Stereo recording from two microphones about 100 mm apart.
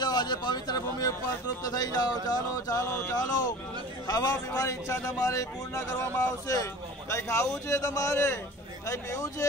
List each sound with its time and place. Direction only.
0.0 s speech: 45° left (ahead or behind)